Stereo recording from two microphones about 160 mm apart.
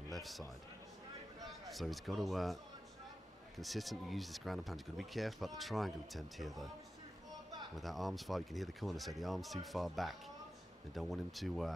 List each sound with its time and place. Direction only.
0.1 s a man's voice: centre (ahead or behind)
1.7 s speech: centre (ahead or behind)
7.7 s speech: centre (ahead or behind)